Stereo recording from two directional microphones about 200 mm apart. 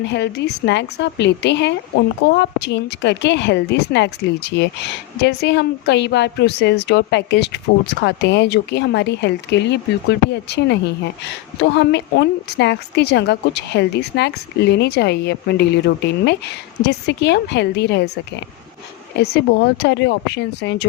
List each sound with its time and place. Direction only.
0.0 s a woman's voice: 60° left (ahead or behind)
19.1 s a woman's voice: 55° left (ahead or behind)